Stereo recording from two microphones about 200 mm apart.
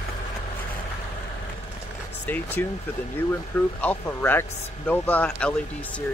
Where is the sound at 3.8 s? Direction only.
10° left (ahead or behind).